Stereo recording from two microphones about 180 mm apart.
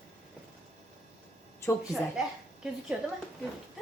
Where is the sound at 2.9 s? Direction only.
5° right (ahead or behind).